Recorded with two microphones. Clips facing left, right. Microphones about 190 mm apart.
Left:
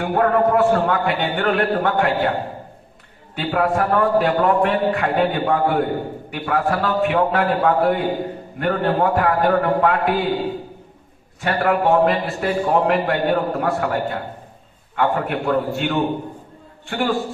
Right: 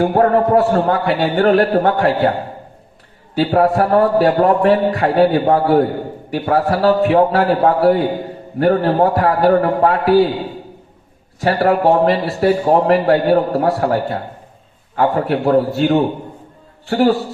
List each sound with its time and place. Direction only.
0.0 s a man's voice: 35° right (ahead or behind)
3.3 s a man's voice: 35° right (ahead or behind)
11.3 s a man's voice: 35° right (ahead or behind)